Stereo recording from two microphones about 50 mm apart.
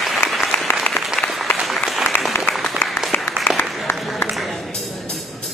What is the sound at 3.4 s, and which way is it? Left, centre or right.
Applause, left.